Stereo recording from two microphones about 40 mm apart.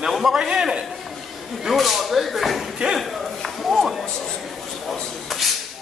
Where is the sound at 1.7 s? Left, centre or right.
Centre.